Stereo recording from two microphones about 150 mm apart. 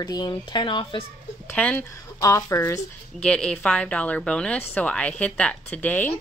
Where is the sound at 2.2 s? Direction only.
20° left (ahead or behind).